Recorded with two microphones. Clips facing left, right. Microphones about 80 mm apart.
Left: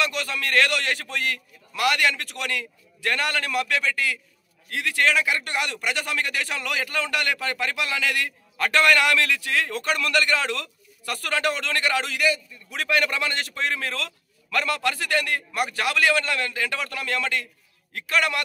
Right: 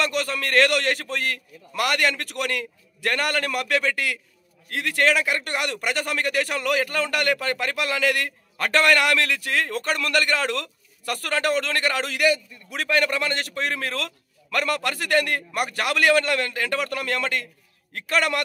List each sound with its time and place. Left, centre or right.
0.0 s a man's voice: right
4.6 s a man's voice: right
12.7 s a man's voice: right